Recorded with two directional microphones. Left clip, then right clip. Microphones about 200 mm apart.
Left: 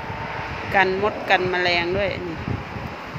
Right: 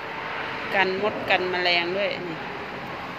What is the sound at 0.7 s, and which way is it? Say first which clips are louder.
Speech: left 4 dB; 20° left (ahead or behind).